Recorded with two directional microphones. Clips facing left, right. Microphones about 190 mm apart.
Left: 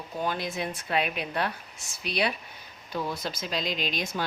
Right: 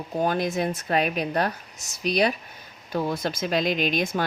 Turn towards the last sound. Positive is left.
turn(degrees=-50)  # may be behind; listen again after turning